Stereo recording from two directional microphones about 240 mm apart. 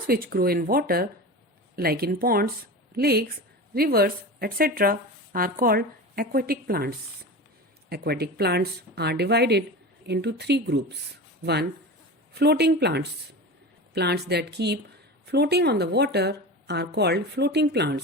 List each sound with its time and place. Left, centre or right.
0.1 s a woman's voice: right
12.3 s a woman's voice: right